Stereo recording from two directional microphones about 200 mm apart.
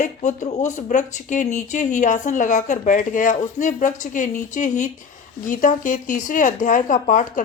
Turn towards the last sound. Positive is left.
turn(degrees=40)  # may be behind; listen again after turning